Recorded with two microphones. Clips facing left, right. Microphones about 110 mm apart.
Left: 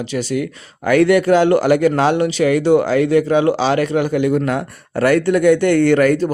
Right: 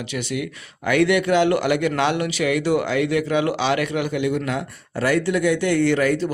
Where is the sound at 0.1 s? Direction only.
35° left (ahead or behind).